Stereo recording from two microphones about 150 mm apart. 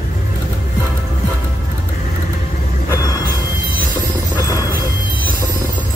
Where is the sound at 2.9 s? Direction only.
20° left (ahead or behind).